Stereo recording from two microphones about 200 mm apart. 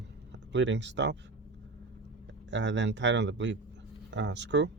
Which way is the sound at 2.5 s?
65° right (ahead or behind).